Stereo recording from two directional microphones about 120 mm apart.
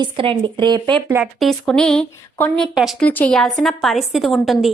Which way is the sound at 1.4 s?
5° left (ahead or behind).